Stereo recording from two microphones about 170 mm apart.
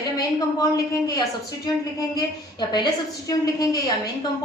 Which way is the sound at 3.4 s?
20° left (ahead or behind).